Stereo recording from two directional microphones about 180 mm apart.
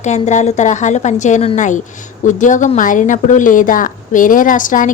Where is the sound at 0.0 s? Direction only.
40° left (ahead or behind).